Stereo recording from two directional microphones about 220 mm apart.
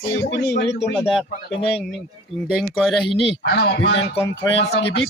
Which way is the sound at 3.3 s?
50° left (ahead or behind).